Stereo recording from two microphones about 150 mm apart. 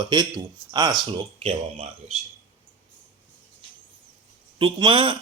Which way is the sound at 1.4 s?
45° right (ahead or behind).